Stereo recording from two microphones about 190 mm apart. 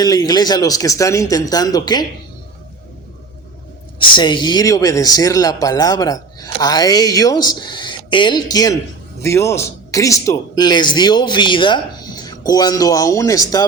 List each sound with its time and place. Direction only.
0.0 s speech: 20° left (ahead or behind)
3.9 s speech: 25° left (ahead or behind)